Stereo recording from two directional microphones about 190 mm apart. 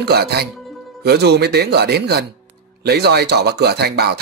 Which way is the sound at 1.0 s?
60° right (ahead or behind).